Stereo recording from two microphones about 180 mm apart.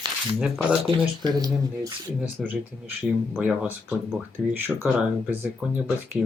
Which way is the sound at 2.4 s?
10° right (ahead or behind).